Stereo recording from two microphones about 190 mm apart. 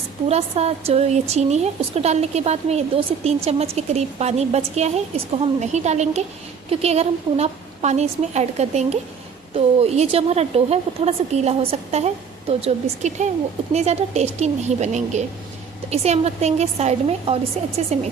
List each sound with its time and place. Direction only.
0.3 s a woman's voice: 35° right (ahead or behind)